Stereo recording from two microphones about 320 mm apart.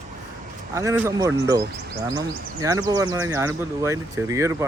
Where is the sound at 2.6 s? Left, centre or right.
Centre.